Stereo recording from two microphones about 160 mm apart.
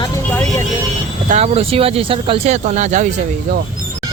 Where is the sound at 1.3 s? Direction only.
45° right (ahead or behind).